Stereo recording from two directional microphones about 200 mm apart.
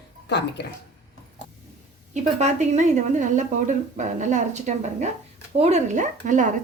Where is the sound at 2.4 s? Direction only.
35° right (ahead or behind).